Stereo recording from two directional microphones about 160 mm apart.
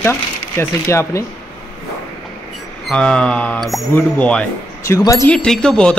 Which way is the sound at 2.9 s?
5° left (ahead or behind).